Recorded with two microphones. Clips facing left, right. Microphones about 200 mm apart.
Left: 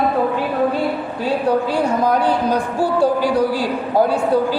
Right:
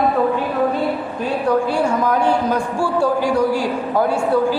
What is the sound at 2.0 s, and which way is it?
A man's voice, 35° left (ahead or behind).